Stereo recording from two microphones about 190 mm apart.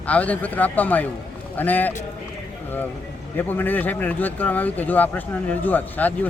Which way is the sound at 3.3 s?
10° left (ahead or behind).